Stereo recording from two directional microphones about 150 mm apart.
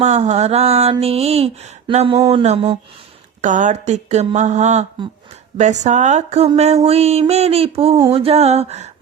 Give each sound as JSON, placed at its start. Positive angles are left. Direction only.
{"t": 0.0, "sound": "speech", "side_deg": -50}
{"t": 3.4, "sound": "speech", "side_deg": -55}